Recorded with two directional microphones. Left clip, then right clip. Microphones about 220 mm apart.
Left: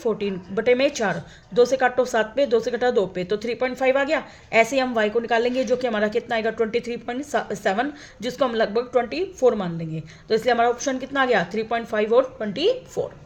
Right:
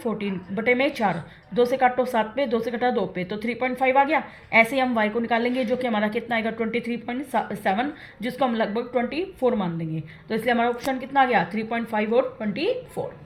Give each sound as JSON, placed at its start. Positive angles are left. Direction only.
{"t": 0.0, "sound": "speech", "side_deg": 40}